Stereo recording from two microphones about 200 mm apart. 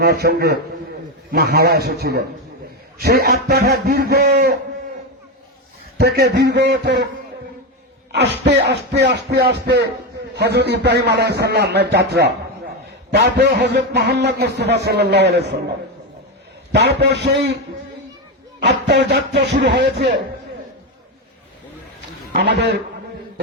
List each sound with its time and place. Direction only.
0.0 s a man's voice: 50° right (ahead or behind)
6.0 s a man's voice: 55° right (ahead or behind)
8.1 s a man's voice: 60° right (ahead or behind)
16.7 s a man's voice: 55° right (ahead or behind)
18.6 s a man's voice: 60° right (ahead or behind)
22.3 s a man's voice: 60° right (ahead or behind)